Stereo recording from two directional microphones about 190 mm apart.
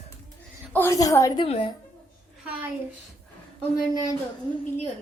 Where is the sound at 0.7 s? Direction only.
15° left (ahead or behind).